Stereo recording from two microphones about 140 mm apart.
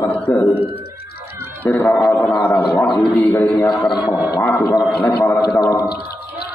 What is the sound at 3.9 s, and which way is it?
Speech, 5° right (ahead or behind).